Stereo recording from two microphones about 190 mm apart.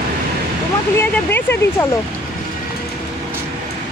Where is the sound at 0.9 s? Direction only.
10° left (ahead or behind).